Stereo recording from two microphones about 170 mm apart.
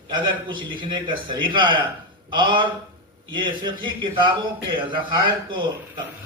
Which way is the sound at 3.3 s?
30° right (ahead or behind).